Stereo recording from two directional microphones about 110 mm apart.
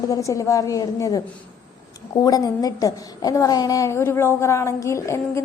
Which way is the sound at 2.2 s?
35° left (ahead or behind).